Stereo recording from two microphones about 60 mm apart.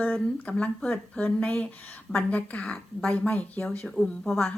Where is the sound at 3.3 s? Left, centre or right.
Left.